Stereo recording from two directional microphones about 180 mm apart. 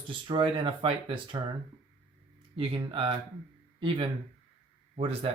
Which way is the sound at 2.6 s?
30° right (ahead or behind).